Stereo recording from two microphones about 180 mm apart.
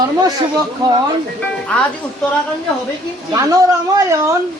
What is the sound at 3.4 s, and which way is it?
Speech, 20° right (ahead or behind).